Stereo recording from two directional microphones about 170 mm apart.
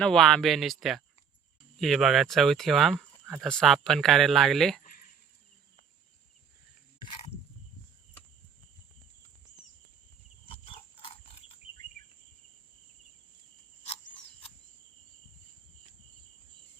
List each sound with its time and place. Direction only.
0.0 s speech: centre (ahead or behind)
10.4 s pig: 35° left (ahead or behind)